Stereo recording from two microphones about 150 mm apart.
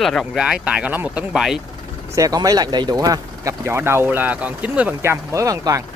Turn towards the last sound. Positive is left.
turn(degrees=-20)  # may be behind; listen again after turning